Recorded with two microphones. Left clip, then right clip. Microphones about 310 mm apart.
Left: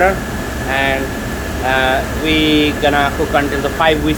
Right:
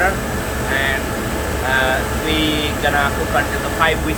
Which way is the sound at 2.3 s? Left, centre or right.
Left.